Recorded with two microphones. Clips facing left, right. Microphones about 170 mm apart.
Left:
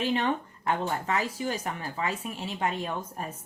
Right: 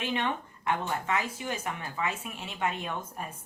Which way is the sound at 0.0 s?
35° left (ahead or behind).